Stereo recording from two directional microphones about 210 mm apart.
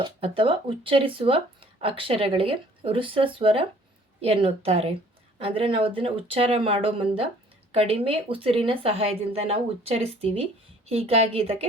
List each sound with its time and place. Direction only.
0.0 s speech: 25° right (ahead or behind)